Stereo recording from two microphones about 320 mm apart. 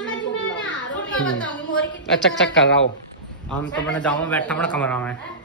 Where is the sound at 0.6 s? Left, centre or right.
Left.